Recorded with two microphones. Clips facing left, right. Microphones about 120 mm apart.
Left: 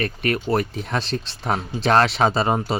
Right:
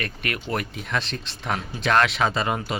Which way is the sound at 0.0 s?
35° left (ahead or behind).